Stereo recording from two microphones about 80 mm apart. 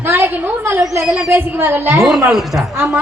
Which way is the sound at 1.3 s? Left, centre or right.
Right.